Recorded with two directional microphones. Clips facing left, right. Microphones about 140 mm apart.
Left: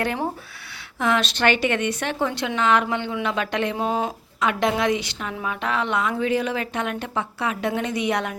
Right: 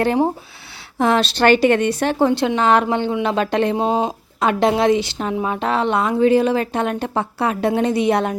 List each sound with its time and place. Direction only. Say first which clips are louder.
0.0 s a woman's voice: right 8 dB; 30° right (ahead or behind)
4.4 s a woman's voice: right 6 dB; 35° right (ahead or behind)